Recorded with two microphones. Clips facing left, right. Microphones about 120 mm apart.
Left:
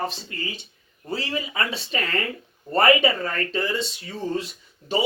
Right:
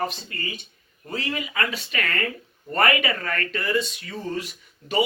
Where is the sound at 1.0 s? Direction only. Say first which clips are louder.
Left 1 dB; 30° left (ahead or behind).